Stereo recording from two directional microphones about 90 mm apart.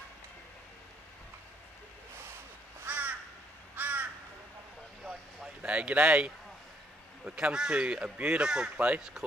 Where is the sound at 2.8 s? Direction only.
15° right (ahead or behind).